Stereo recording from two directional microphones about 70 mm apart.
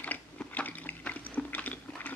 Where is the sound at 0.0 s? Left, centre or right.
Left.